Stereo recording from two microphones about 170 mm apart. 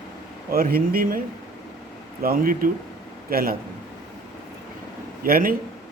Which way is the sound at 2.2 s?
60° right (ahead or behind).